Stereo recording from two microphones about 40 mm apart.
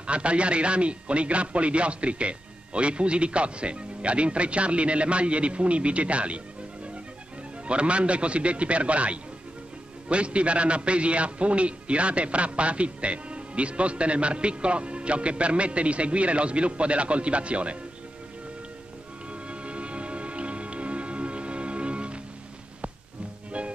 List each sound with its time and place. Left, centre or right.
0.0 s speech: right
7.6 s a man's voice: right
19.4 s music: right